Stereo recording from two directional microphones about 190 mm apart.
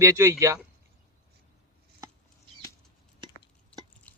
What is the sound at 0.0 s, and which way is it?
Speech, 15° right (ahead or behind).